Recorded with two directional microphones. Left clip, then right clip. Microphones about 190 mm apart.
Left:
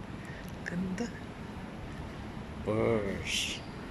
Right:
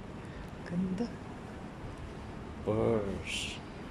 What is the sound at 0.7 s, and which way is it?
Speech, 10° right (ahead or behind).